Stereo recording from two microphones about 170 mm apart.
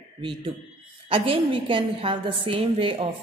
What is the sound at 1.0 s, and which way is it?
Speech, 30° right (ahead or behind).